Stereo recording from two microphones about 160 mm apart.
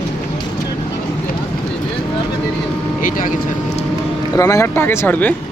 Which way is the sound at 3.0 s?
55° left (ahead or behind).